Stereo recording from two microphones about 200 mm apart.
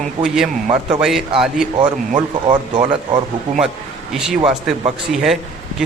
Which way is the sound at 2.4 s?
25° right (ahead or behind).